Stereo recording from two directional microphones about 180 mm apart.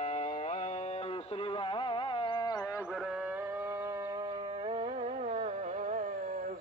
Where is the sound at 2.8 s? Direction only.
5° right (ahead or behind); by 6.5 s 45° right (ahead or behind).